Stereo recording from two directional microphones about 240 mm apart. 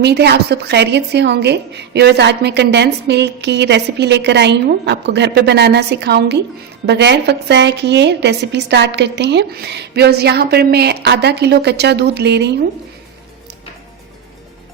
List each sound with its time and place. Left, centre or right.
0.0 s a woman's voice: right